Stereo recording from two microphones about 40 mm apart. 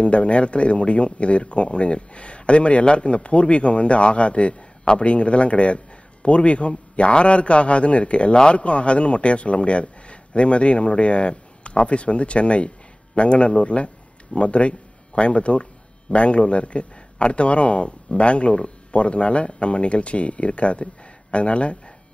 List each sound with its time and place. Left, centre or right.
0.0 s a man's voice: left